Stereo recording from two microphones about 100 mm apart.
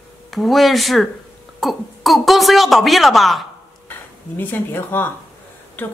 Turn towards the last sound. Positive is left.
turn(degrees=20)  # may be behind; listen again after turning